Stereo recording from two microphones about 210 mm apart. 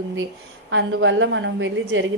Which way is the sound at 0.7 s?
65° right (ahead or behind).